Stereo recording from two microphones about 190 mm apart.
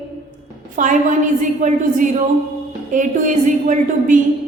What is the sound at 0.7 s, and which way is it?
A woman's voice, 40° right (ahead or behind).